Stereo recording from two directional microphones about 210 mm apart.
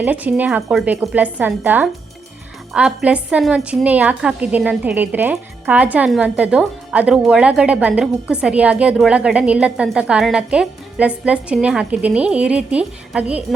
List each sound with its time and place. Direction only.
0.0 s a woman's voice: 5° right (ahead or behind)